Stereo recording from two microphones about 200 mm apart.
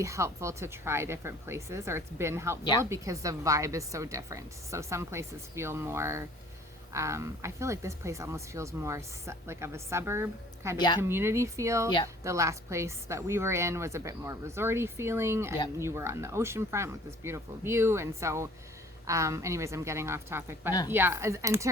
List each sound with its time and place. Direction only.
0.0 s speech: 15° right (ahead or behind)
10.8 s a woman's voice: 20° left (ahead or behind)
11.1 s speech: 10° right (ahead or behind)